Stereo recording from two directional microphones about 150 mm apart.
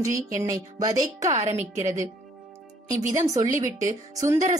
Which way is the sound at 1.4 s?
50° right (ahead or behind).